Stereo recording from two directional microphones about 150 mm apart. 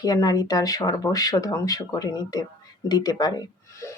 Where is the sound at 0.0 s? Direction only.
25° left (ahead or behind).